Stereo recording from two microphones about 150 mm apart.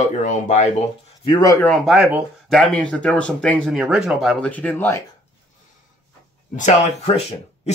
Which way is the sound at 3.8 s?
5° right (ahead or behind).